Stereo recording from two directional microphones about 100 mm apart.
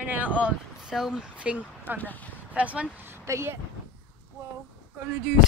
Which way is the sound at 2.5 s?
15° right (ahead or behind).